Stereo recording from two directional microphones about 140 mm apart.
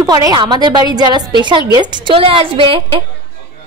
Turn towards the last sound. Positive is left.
turn(degrees=-40)  # may be behind; listen again after turning